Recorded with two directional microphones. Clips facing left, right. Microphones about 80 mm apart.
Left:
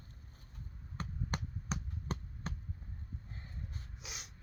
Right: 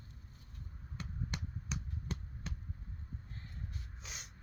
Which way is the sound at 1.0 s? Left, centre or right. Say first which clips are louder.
Left 3 dB; left.